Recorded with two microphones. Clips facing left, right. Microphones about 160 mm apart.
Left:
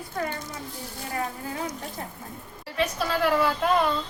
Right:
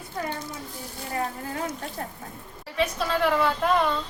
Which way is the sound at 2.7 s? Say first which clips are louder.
Right 1 dB; centre (ahead or behind).